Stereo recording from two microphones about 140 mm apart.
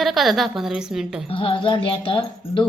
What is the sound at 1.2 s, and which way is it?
Speech, 40° left (ahead or behind).